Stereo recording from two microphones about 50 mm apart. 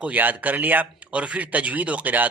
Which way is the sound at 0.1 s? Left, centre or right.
Right.